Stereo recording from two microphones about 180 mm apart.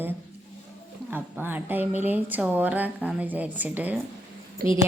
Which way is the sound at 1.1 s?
10° right (ahead or behind).